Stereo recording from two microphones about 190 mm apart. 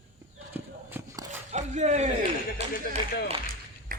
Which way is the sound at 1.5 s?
40° right (ahead or behind).